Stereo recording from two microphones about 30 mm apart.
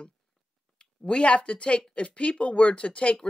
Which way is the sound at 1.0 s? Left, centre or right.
Left.